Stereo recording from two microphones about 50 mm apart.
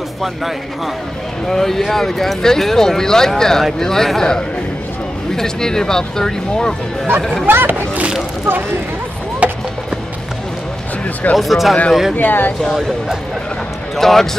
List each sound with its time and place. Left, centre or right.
1.5 s speech: centre
7.4 s speech: right
9.4 s music: right
11.3 s speech: centre
12.2 s speech: left
13.9 s speech: centre